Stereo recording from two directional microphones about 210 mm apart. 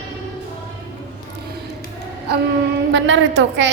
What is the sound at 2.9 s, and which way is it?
Speech, 60° right (ahead or behind).